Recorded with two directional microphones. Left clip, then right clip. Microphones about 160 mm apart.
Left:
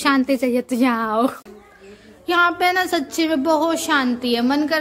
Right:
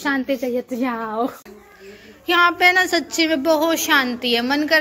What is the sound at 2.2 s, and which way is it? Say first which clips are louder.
A woman's voice: right 2 dB; 15° left (ahead or behind).